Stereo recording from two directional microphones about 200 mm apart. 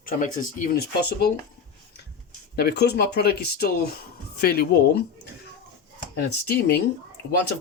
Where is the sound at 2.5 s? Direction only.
50° left (ahead or behind).